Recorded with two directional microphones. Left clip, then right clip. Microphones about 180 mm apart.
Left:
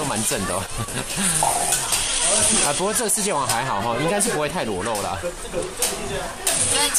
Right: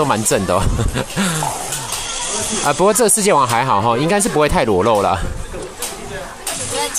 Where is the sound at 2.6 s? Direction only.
35° right (ahead or behind).